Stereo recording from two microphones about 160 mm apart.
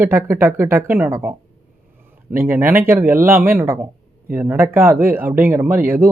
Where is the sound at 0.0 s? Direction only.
15° right (ahead or behind).